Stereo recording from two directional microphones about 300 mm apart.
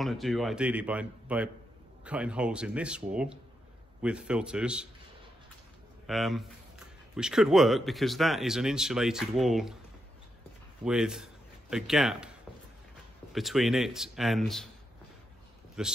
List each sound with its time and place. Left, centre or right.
0.0 s speech: centre
6.0 s speech: centre
10.8 s speech: centre
15.8 s speech: centre